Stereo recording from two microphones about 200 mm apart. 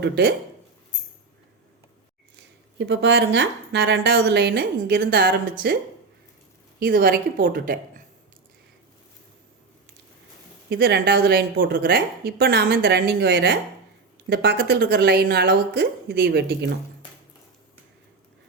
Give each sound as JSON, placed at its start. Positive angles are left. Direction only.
{"t": 0.0, "sound": "a woman's voice", "side_deg": -55}
{"t": 2.3, "sound": "a woman's voice", "side_deg": -65}
{"t": 10.7, "sound": "a woman's voice", "side_deg": -50}